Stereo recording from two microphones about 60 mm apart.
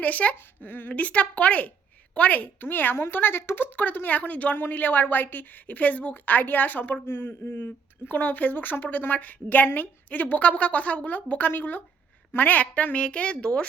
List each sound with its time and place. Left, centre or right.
0.0 s a woman's voice: left